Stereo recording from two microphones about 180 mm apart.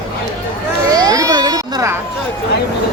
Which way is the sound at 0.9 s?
20° right (ahead or behind).